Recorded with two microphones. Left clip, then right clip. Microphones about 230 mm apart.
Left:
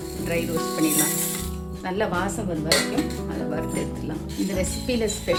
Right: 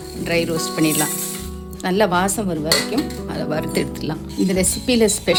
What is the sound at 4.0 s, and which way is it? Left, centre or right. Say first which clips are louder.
Speech: right 6 dB; right.